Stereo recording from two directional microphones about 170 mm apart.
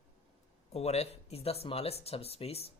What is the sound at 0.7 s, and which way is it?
Speech, 40° left (ahead or behind).